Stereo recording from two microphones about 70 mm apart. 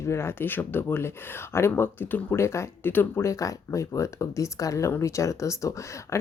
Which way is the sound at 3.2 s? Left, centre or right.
Left.